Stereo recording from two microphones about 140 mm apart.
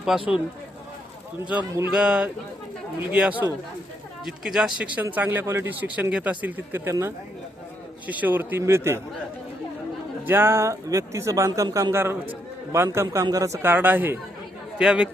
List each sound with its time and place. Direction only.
0.1 s speech: 5° right (ahead or behind)
1.5 s speech: 10° right (ahead or behind)
10.2 s a man's voice: 15° right (ahead or behind)